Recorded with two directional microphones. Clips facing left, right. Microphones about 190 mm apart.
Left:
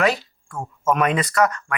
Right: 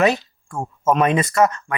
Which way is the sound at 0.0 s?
25° right (ahead or behind).